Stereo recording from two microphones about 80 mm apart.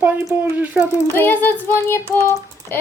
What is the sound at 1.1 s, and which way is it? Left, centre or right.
Speech, left.